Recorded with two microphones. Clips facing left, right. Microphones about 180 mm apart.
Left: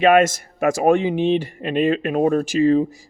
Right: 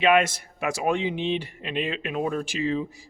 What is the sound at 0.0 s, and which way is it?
Speech, 45° left (ahead or behind).